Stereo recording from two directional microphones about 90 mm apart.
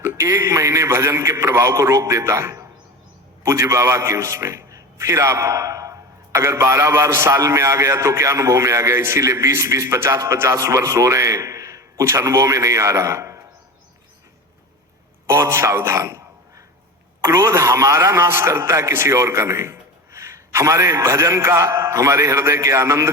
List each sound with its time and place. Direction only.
0.0 s a man's voice: 30° right (ahead or behind)
15.3 s a man's voice: 30° right (ahead or behind)